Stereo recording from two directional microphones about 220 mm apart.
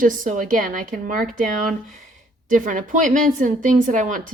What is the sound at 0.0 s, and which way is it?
Speech, 35° right (ahead or behind).